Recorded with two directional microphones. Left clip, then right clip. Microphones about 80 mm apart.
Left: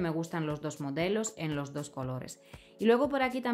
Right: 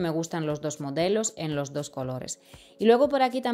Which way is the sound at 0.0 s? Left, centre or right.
Right.